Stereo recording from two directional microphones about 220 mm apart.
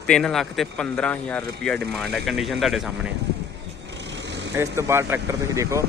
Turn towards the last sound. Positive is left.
turn(degrees=-15)  # may be behind; listen again after turning